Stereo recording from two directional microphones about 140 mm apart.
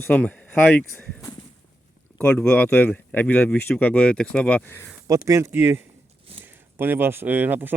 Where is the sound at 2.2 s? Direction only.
10° left (ahead or behind).